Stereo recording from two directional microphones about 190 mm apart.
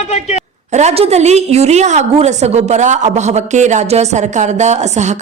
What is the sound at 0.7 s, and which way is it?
A woman's voice, 35° right (ahead or behind).